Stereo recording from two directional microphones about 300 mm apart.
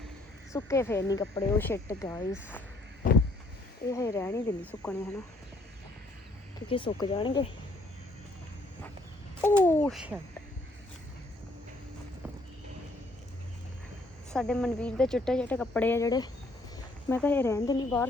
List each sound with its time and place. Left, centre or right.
0.5 s speech: centre
3.0 s a sound: left
3.9 s speech: centre
6.7 s speech: centre
9.4 s speech: centre
14.3 s speech: centre